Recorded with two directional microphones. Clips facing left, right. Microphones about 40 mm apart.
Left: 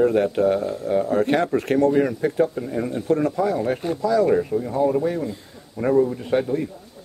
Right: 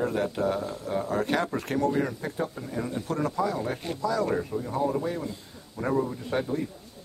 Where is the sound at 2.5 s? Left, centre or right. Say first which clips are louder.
Left 7 dB; left.